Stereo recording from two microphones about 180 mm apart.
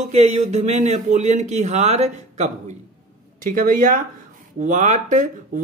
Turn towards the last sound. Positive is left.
turn(degrees=-45)  # may be behind; listen again after turning